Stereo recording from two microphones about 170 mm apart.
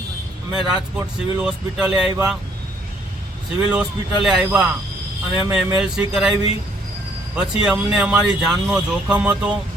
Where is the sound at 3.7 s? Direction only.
5° right (ahead or behind).